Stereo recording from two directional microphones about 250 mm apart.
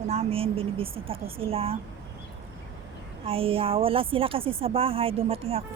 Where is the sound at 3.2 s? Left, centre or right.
Right.